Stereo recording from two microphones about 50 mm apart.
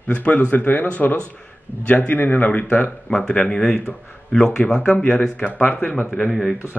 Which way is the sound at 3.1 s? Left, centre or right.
Centre.